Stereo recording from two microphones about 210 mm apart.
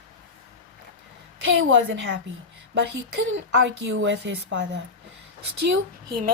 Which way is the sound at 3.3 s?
65° right (ahead or behind).